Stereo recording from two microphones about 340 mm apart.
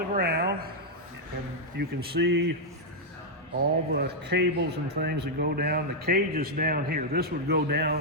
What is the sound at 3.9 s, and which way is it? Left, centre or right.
Speech, right.